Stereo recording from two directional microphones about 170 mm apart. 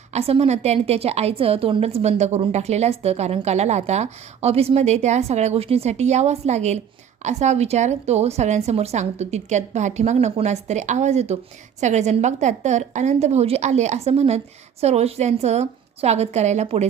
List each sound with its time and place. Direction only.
0.1 s a woman's voice: 35° right (ahead or behind)